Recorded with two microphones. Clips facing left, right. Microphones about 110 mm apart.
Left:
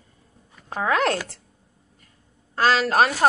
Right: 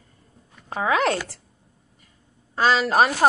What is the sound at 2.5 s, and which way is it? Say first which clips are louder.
Speech: even; centre (ahead or behind).